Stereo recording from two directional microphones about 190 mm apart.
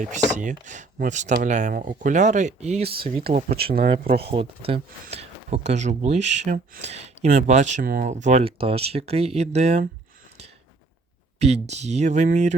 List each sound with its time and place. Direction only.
0.0 s speech: 40° right (ahead or behind)
3.2 s speech: 55° right (ahead or behind)
4.3 s speech: 30° right (ahead or behind)
11.3 s speech: 35° right (ahead or behind)